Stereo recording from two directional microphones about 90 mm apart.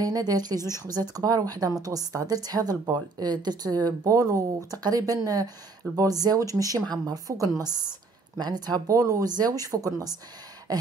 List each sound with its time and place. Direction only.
0.0 s speech: 45° right (ahead or behind)